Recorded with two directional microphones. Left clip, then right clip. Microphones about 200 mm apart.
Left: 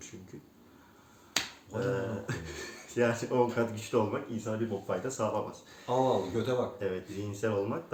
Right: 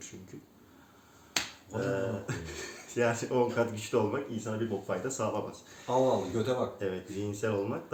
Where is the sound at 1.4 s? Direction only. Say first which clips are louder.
Even; 15° left (ahead or behind).